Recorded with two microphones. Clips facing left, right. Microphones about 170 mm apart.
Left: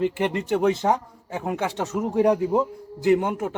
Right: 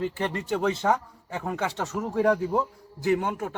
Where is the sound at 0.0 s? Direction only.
15° left (ahead or behind).